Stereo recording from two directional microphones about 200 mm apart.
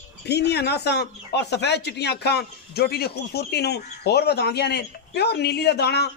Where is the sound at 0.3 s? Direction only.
55° left (ahead or behind).